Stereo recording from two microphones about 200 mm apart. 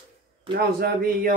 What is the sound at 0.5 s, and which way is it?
Speech, 50° right (ahead or behind).